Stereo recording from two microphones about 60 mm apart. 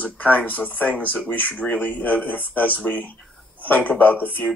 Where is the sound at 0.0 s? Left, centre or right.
Left.